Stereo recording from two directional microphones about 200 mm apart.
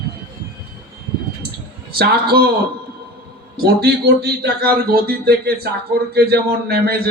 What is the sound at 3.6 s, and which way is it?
A man's voice, 55° right (ahead or behind).